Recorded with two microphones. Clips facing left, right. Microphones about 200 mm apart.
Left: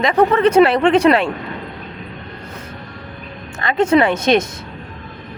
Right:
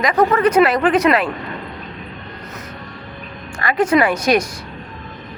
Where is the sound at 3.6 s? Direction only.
25° left (ahead or behind).